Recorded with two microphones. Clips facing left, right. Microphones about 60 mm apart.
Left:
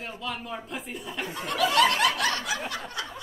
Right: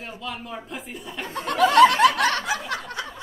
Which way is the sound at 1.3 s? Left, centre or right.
Right.